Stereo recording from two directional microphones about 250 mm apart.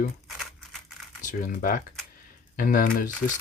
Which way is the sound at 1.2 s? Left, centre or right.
Left.